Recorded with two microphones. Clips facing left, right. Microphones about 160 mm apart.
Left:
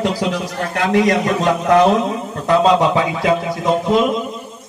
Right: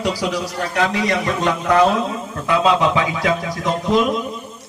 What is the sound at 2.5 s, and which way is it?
Speech, 35° left (ahead or behind).